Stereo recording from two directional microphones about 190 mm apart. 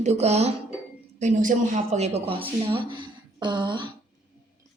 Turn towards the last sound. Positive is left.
turn(degrees=-25)  # may be behind; listen again after turning